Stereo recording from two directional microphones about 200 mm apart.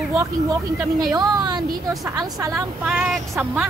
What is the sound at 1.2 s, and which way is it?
A woman's voice, 20° right (ahead or behind).